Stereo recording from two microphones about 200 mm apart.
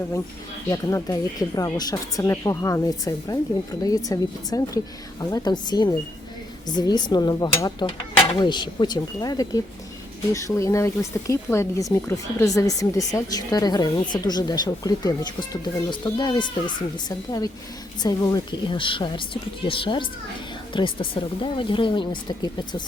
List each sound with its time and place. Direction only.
0.7 s a woman's voice: 15° left (ahead or behind)